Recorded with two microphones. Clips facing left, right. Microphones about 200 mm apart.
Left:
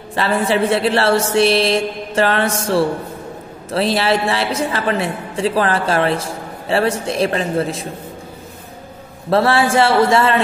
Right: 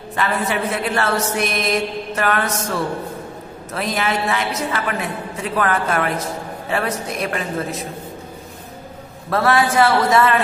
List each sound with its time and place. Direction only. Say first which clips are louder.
0.1 s a man's voice: left 4 dB; 30° left (ahead or behind)
9.3 s a man's voice: left 3 dB; 30° left (ahead or behind)